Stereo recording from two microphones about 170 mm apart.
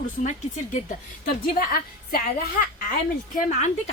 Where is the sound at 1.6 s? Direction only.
60° left (ahead or behind).